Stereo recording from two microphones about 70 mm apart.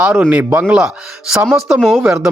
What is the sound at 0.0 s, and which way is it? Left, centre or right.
Speech, centre.